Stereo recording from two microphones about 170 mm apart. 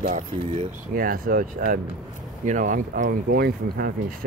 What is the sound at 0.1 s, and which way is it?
Speech, 50° right (ahead or behind).